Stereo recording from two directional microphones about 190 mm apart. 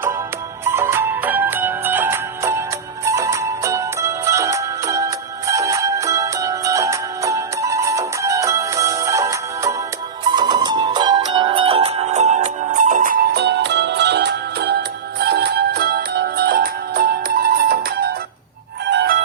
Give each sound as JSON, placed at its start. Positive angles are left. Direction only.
{"t": 0.6, "sound": "music", "side_deg": -15}
{"t": 18.9, "sound": "music", "side_deg": -65}